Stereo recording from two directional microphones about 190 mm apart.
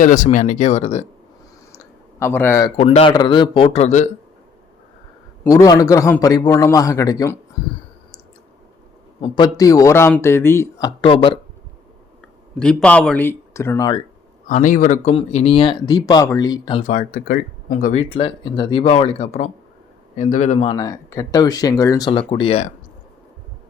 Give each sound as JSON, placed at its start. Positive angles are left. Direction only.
{"t": 0.0, "sound": "speech", "side_deg": 45}
{"t": 1.8, "sound": "a sound", "side_deg": 15}
{"t": 2.7, "sound": "speech", "side_deg": 30}
{"t": 5.4, "sound": "a man's voice", "side_deg": 15}
{"t": 9.2, "sound": "speech", "side_deg": 25}
{"t": 12.5, "sound": "a man's voice", "side_deg": 5}
{"t": 14.4, "sound": "speech", "side_deg": 45}
{"t": 15.1, "sound": "speech", "side_deg": 30}
{"t": 16.8, "sound": "speech", "side_deg": 45}
{"t": 18.1, "sound": "speech", "side_deg": 25}